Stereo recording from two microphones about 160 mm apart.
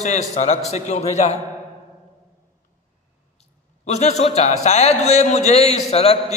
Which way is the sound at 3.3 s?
45° left (ahead or behind).